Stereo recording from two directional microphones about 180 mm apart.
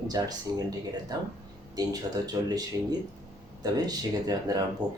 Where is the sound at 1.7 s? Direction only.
20° right (ahead or behind).